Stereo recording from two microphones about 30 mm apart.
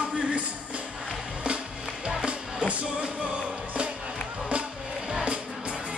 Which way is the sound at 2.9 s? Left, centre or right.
Right.